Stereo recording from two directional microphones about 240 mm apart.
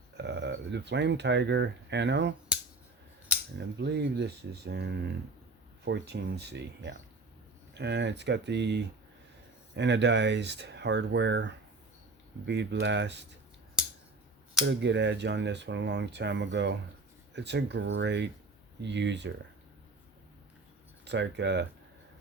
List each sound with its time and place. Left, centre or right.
0.2 s speech: right
3.6 s speech: right
12.8 s speech: right
14.6 s speech: right
21.0 s speech: right